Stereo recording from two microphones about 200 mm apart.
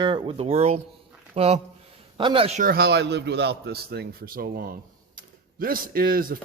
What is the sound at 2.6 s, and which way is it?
Speech, 50° right (ahead or behind).